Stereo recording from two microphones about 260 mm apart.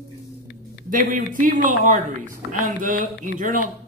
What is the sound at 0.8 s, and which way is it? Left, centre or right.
Speech, right.